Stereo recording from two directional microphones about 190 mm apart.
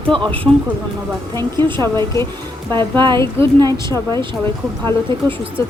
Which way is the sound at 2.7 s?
25° right (ahead or behind).